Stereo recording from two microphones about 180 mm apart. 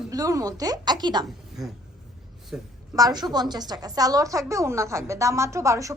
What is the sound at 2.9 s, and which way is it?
A woman's voice, 20° right (ahead or behind).